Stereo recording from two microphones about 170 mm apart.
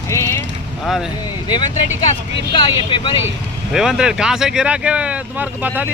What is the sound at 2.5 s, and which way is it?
Speech, 30° left (ahead or behind).